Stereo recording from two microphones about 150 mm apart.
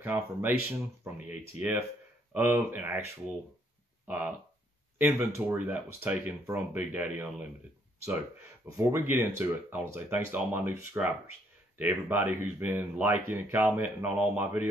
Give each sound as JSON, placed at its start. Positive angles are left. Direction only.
{"t": 0.0, "sound": "speech", "side_deg": -15}
{"t": 4.9, "sound": "speech", "side_deg": -10}
{"t": 8.6, "sound": "speech", "side_deg": -20}